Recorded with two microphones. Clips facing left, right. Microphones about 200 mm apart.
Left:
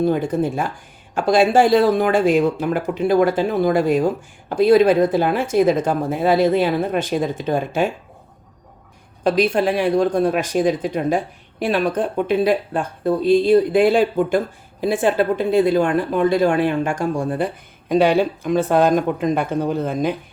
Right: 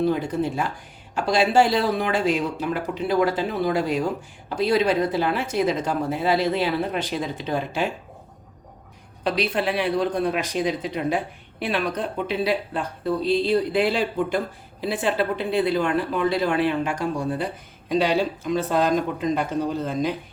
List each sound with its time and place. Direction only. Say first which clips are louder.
0.0 s speech: left 4 dB; 50° left (ahead or behind)
9.2 s speech: left 6 dB; 45° left (ahead or behind)